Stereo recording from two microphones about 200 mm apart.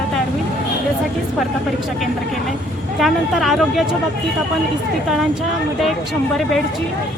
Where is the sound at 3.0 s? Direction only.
Centre (ahead or behind).